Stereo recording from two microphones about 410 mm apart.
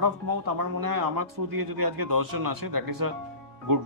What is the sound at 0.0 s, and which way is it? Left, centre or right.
Speech, right.